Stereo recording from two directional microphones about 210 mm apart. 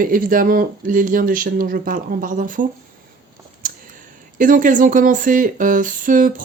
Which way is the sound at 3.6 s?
40° right (ahead or behind).